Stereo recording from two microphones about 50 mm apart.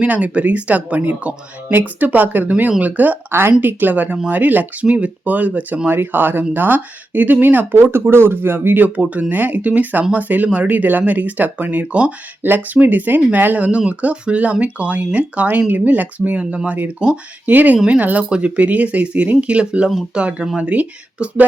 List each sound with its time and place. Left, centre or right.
0.0 s speech: right
2.5 s speech: right
9.0 s speech: right
12.4 s speech: right
13.7 s speech: right